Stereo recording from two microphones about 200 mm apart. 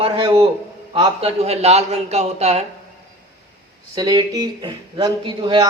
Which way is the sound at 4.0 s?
20° right (ahead or behind).